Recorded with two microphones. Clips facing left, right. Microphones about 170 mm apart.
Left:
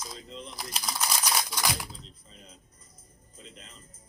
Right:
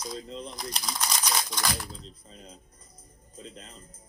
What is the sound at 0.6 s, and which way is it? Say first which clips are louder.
Speech: left 3 dB; 5° left (ahead or behind).